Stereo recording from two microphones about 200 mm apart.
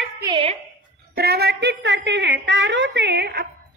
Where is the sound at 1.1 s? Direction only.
50° right (ahead or behind).